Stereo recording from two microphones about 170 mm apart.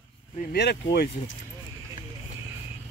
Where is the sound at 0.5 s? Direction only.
70° left (ahead or behind).